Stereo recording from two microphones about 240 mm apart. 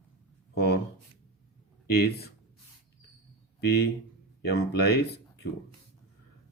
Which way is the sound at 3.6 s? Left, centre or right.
Left.